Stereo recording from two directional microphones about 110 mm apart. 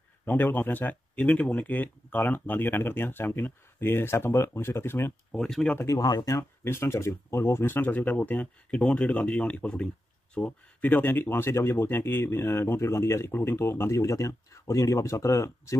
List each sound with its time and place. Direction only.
0.2 s speech: 20° left (ahead or behind)
5.3 s speech: 5° left (ahead or behind)
5.9 s speech: 35° left (ahead or behind)
6.6 s speech: 20° left (ahead or behind)